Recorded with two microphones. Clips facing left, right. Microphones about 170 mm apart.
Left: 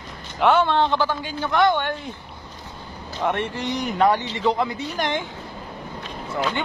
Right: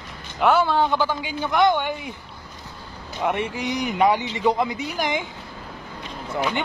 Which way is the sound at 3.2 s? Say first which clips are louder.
Even; 10° right (ahead or behind).